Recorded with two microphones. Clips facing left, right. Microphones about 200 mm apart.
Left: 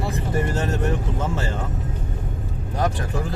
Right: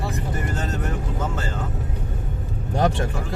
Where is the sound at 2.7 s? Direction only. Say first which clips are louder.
Right 3 dB; 25° right (ahead or behind).